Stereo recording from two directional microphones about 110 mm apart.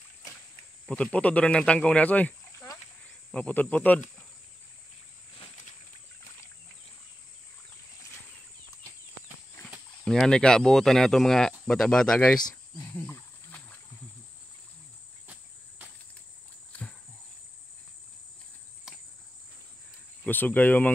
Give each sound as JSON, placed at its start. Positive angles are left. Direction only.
{"t": 0.8, "sound": "speech", "side_deg": 10}
{"t": 10.0, "sound": "speech", "side_deg": 5}
{"t": 12.7, "sound": "wild animals", "side_deg": 15}
{"t": 20.2, "sound": "speech", "side_deg": 15}